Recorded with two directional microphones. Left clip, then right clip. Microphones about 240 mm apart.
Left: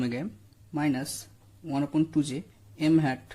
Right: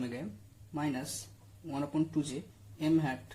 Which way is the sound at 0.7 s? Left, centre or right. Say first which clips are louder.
Left 7 dB; left.